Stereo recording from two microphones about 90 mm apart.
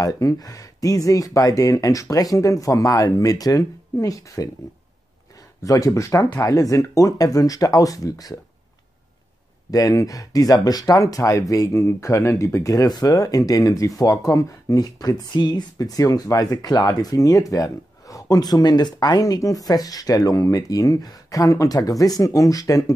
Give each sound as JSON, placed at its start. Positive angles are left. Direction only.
{"t": 0.0, "sound": "speech", "side_deg": 40}
{"t": 5.6, "sound": "speech", "side_deg": 40}
{"t": 9.7, "sound": "speech", "side_deg": 40}